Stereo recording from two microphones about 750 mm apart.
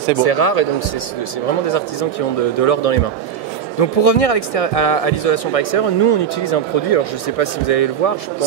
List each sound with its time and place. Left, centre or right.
0.2 s speech: left
2.6 s speech: left